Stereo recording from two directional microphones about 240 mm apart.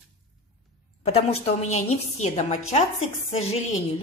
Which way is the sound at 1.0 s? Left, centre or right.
Left.